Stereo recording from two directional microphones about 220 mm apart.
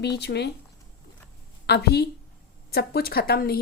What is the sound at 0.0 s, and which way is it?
Speech, 50° left (ahead or behind).